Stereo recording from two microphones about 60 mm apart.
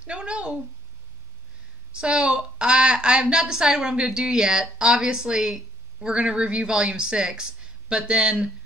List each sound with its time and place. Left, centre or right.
0.0 s speech: centre
2.0 s a woman's voice: centre